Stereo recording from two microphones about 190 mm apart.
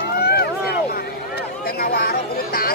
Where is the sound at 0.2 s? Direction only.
55° left (ahead or behind).